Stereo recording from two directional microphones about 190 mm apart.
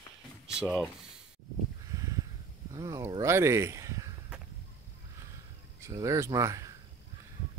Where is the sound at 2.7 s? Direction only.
20° right (ahead or behind).